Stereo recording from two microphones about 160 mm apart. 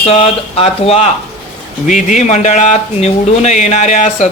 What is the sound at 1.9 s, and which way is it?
Speech, 50° left (ahead or behind).